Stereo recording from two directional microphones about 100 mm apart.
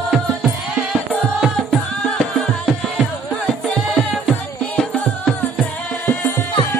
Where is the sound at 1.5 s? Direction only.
5° left (ahead or behind).